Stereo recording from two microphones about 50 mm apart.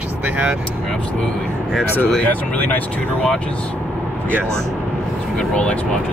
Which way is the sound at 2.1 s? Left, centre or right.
Left.